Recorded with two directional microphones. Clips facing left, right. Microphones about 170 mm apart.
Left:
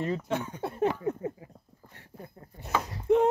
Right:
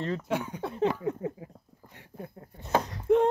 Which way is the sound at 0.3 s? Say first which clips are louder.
Right 1 dB; 10° right (ahead or behind).